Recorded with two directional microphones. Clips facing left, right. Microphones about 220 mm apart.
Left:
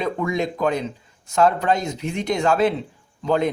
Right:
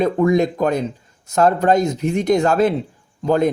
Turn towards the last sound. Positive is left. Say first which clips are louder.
# right 4 dB
turn(degrees=-45)  # may be behind; listen again after turning